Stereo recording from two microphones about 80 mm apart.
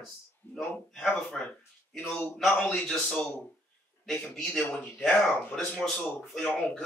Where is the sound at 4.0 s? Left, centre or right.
Centre.